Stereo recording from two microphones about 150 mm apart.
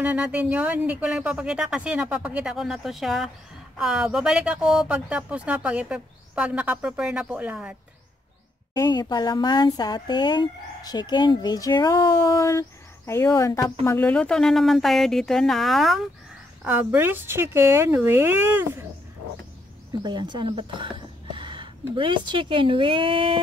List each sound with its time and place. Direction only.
0.0 s speech: 10° right (ahead or behind)
8.7 s speech: 25° left (ahead or behind); by 16.0 s centre (ahead or behind)
16.6 s speech: 10° right (ahead or behind)
19.9 s speech: 30° right (ahead or behind)